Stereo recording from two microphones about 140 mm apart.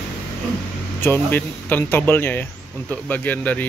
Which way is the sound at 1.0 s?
15° left (ahead or behind).